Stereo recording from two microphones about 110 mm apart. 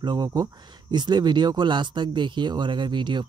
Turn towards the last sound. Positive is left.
turn(degrees=-45)  # may be behind; listen again after turning